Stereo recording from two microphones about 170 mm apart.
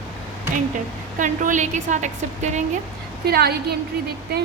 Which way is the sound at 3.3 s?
65° right (ahead or behind).